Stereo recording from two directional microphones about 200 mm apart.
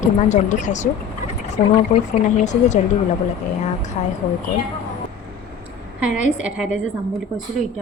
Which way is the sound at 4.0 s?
35° left (ahead or behind).